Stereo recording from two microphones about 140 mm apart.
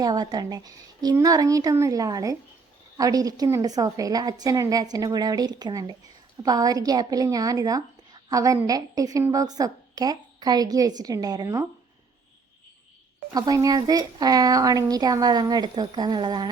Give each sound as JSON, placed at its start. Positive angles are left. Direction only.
{"t": 0.0, "sound": "speech", "side_deg": -30}
{"t": 13.3, "sound": "speech", "side_deg": -25}